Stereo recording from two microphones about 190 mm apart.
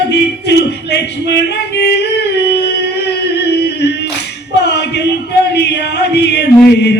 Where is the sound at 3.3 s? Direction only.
60° left (ahead or behind).